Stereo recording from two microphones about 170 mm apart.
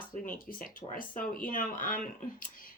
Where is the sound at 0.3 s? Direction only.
55° left (ahead or behind).